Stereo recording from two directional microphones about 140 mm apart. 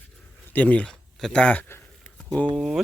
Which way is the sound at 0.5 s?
10° left (ahead or behind).